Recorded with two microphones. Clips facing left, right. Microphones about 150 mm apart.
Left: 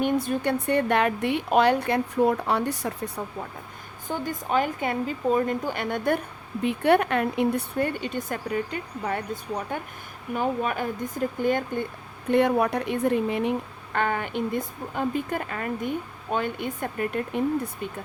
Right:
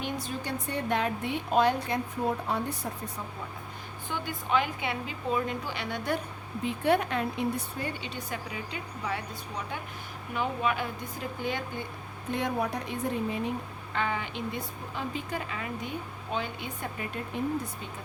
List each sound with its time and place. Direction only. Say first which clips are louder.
0.0 s a woman's voice: left 10 dB; 55° left (ahead or behind); by 2.9 s 80° left
4.1 s speech: left 3 dB; 40° left (ahead or behind)
6.6 s speech: left 5 dB; 65° left (ahead or behind)
12.3 s speech: left 9 dB; 65° left (ahead or behind)
13.9 s speech: left 6 dB; 55° left (ahead or behind)